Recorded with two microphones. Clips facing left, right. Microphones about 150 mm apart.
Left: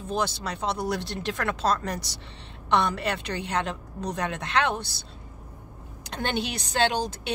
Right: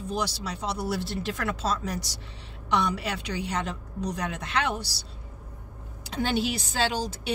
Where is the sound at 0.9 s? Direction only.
5° right (ahead or behind).